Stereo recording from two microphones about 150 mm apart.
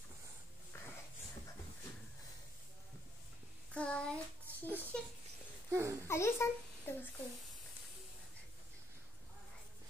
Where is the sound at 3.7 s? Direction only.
10° left (ahead or behind).